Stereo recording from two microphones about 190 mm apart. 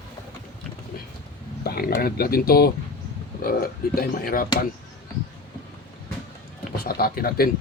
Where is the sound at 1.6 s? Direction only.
55° left (ahead or behind).